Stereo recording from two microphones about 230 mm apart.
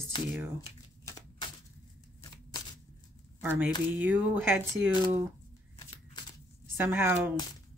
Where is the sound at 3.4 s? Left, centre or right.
Centre.